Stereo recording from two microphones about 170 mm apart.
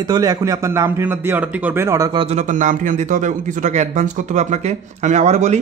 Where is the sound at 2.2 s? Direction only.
45° right (ahead or behind).